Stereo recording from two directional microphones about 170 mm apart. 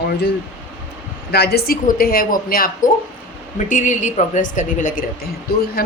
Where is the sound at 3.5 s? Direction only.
50° left (ahead or behind).